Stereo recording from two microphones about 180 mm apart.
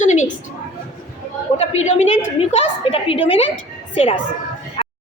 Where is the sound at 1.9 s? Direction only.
40° left (ahead or behind).